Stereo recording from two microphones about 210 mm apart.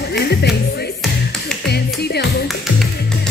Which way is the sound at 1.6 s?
50° left (ahead or behind).